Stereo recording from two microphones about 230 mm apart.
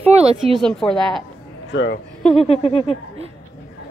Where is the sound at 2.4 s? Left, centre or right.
Left.